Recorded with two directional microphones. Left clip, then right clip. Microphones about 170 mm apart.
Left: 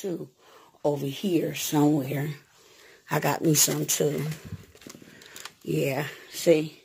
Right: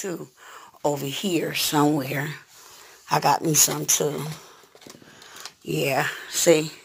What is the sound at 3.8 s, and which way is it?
Speech, 45° left (ahead or behind).